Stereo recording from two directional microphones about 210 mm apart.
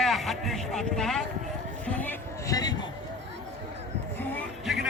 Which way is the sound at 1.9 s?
10° left (ahead or behind).